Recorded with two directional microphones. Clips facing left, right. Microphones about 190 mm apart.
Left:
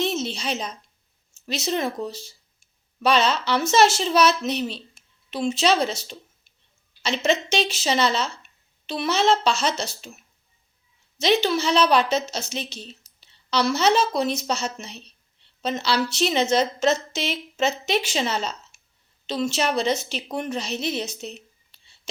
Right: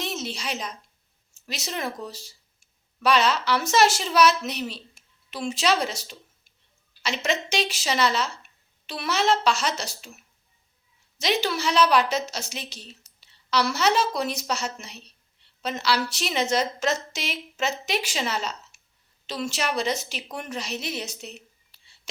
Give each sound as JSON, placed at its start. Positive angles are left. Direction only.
{"t": 0.0, "sound": "a sound", "side_deg": 25}
{"t": 1.5, "sound": "a woman's voice", "side_deg": 25}
{"t": 11.2, "sound": "a woman's voice", "side_deg": 25}